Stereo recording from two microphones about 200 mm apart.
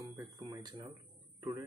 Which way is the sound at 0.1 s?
15° right (ahead or behind).